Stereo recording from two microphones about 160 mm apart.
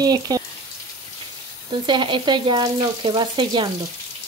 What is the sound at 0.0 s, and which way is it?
Speech, 25° right (ahead or behind).